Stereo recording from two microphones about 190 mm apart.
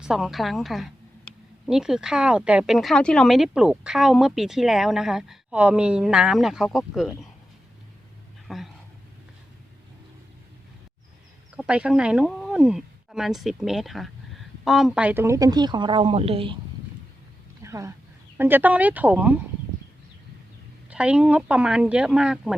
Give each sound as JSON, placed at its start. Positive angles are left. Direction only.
{"t": 0.0, "sound": "speech", "side_deg": 0}
{"t": 8.4, "sound": "speech", "side_deg": 0}
{"t": 11.5, "sound": "speech", "side_deg": -5}
{"t": 17.6, "sound": "a sound", "side_deg": -15}
{"t": 18.3, "sound": "speech", "side_deg": -10}
{"t": 20.9, "sound": "speech", "side_deg": -5}